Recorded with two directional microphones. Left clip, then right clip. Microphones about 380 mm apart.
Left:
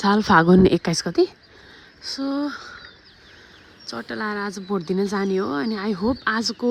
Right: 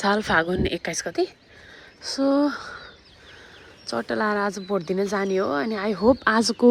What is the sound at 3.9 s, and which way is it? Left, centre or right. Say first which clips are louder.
A woman's voice: right 4 dB; centre.